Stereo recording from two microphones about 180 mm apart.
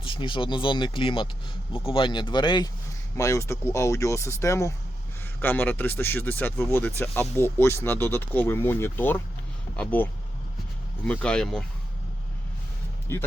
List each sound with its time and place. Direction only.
0.0 s speech: 30° left (ahead or behind); by 11.6 s 5° left (ahead or behind)
13.1 s speech: 15° left (ahead or behind)